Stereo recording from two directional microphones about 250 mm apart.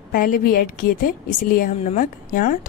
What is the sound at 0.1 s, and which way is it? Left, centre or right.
A woman's voice, left.